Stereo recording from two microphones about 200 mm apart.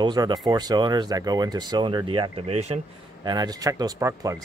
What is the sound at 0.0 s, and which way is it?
Speech, 20° right (ahead or behind).